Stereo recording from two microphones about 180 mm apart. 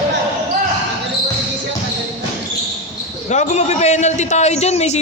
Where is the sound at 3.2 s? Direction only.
40° left (ahead or behind).